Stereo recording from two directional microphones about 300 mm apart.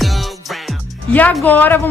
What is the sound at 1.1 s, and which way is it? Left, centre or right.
Speech, centre.